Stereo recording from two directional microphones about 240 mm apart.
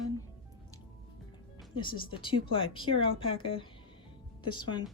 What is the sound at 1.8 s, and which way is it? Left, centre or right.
A woman's voice, centre.